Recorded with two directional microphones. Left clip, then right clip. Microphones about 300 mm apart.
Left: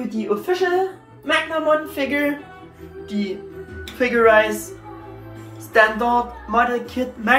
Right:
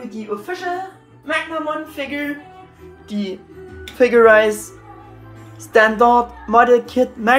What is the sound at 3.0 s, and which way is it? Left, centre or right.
Music, centre.